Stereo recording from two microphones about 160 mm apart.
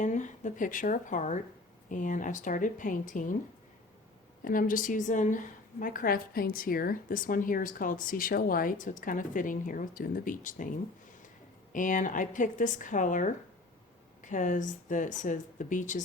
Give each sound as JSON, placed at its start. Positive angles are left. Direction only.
{"t": 0.0, "sound": "a woman's voice", "side_deg": 50}
{"t": 4.4, "sound": "a woman's voice", "side_deg": 60}
{"t": 11.7, "sound": "speech", "side_deg": 55}